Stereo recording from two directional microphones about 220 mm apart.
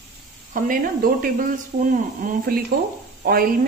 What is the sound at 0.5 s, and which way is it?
A woman's voice, 40° right (ahead or behind).